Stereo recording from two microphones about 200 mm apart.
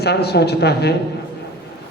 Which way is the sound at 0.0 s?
55° left (ahead or behind).